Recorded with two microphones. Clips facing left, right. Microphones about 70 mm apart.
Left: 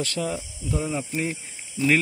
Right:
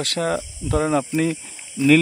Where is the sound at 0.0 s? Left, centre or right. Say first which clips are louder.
Right 5 dB; right.